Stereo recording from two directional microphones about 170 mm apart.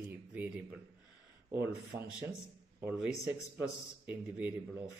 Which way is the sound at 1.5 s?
15° right (ahead or behind).